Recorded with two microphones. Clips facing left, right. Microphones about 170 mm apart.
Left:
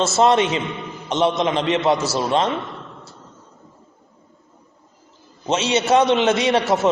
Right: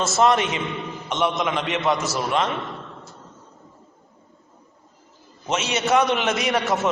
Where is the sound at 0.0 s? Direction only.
25° left (ahead or behind).